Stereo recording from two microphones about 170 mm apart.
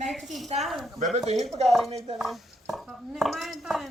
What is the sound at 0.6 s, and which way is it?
Speech, centre (ahead or behind).